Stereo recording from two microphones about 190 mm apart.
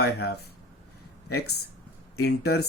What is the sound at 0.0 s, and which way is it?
Speech, 55° left (ahead or behind).